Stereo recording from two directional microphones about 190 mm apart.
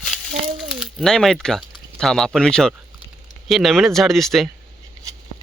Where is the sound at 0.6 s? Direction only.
Centre (ahead or behind).